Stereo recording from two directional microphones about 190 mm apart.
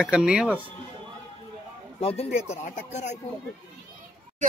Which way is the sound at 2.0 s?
30° left (ahead or behind).